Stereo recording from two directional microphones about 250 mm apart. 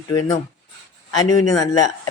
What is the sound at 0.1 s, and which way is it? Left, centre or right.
Speech, centre.